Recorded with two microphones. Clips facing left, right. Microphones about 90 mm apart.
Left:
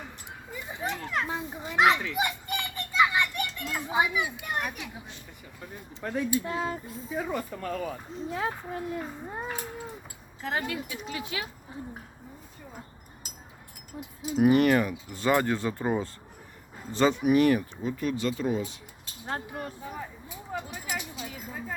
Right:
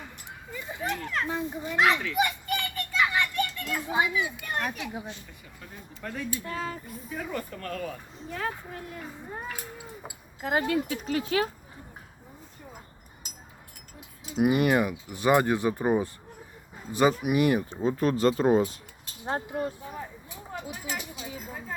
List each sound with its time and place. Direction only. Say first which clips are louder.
0.8 s children playing: even; 20° left (ahead or behind)
6.0 s speech: left 6 dB; 20° left (ahead or behind)
10.4 s speech: right 4 dB; 30° right (ahead or behind)
10.8 s speech: right 7 dB; 45° right (ahead or behind)
14.4 s speech: left 2 dB; 15° right (ahead or behind)
17.7 s speech: right 5 dB; 35° right (ahead or behind)
19.2 s speech: right 5 dB; 25° right (ahead or behind)
21.2 s speech: even; 10° right (ahead or behind)